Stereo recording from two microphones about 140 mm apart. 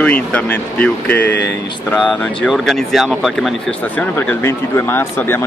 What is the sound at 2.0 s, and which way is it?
Speech, centre (ahead or behind).